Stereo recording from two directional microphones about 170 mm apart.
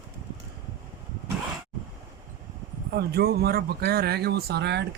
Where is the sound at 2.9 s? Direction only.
70° right (ahead or behind).